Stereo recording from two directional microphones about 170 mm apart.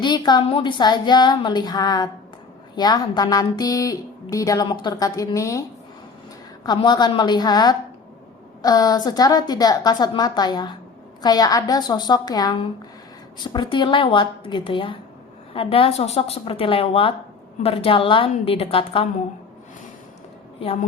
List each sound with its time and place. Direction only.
0.0 s speech: 25° left (ahead or behind)
6.7 s speech: 25° left (ahead or behind)